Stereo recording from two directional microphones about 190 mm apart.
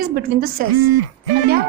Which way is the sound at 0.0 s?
55° right (ahead or behind).